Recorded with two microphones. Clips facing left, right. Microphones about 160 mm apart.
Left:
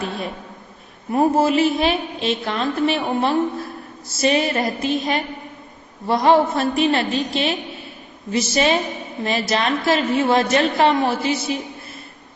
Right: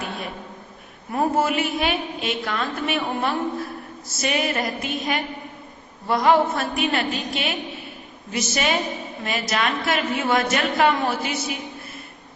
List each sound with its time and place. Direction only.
1.1 s a woman's voice: 30° left (ahead or behind)